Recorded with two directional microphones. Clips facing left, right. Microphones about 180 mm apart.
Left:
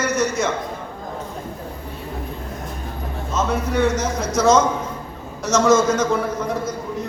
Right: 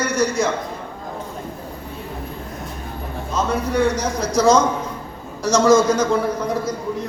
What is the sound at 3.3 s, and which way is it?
A man's voice, centre (ahead or behind).